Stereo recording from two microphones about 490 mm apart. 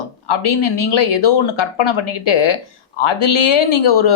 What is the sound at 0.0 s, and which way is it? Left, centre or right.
Speech, left.